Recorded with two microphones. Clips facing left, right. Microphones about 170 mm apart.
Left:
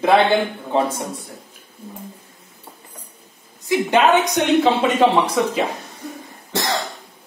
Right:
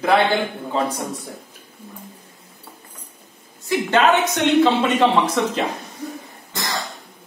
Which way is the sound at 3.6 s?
15° left (ahead or behind).